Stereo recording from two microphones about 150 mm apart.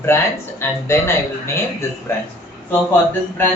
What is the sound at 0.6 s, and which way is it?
Speech, 15° left (ahead or behind).